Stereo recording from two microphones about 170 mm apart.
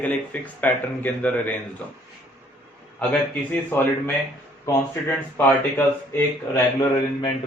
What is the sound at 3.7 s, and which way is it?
Speech, 15° left (ahead or behind).